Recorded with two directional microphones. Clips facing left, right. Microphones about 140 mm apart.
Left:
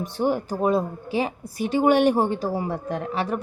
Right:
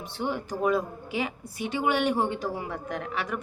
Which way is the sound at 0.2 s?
35° left (ahead or behind).